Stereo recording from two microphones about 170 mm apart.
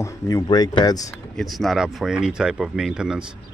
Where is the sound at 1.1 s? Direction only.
Centre (ahead or behind).